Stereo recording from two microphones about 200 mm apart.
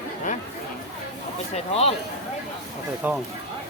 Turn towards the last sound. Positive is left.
turn(degrees=-5)  # may be behind; listen again after turning